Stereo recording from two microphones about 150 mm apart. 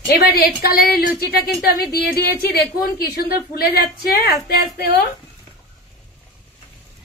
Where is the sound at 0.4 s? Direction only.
90° left.